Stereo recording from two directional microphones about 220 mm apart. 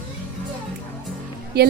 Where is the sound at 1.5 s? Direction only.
45° right (ahead or behind).